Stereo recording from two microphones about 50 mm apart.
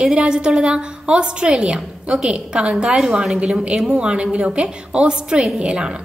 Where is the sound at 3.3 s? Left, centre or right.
Centre.